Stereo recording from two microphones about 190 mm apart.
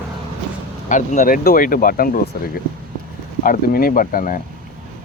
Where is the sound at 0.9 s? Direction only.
40° left (ahead or behind).